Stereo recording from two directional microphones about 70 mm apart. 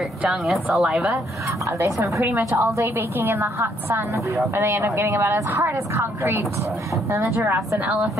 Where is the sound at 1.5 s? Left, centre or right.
Right.